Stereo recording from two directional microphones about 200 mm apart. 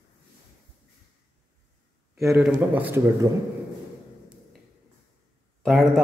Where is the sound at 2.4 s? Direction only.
10° right (ahead or behind).